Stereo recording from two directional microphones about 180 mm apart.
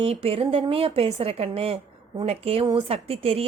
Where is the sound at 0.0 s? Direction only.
35° right (ahead or behind).